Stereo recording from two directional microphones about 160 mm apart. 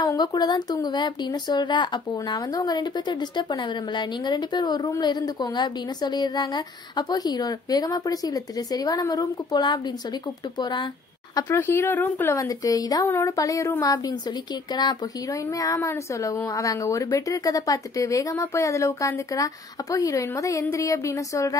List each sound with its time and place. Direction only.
0.0 s speech: 25° left (ahead or behind)
11.3 s speech: 15° left (ahead or behind)